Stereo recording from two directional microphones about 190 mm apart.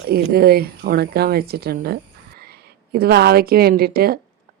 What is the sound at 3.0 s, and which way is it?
Speech, 55° right (ahead or behind).